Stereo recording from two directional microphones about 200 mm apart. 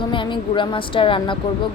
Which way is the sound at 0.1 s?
25° left (ahead or behind).